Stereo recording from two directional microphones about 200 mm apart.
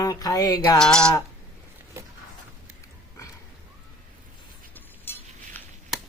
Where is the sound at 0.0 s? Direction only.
20° left (ahead or behind).